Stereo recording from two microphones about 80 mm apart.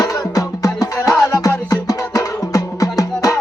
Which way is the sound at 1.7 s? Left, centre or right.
Left.